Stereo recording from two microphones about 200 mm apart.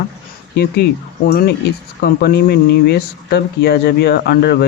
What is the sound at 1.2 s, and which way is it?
Speech, 50° left (ahead or behind).